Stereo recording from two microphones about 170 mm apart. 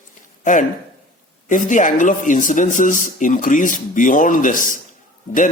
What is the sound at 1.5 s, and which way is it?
A man's voice, 50° left (ahead or behind).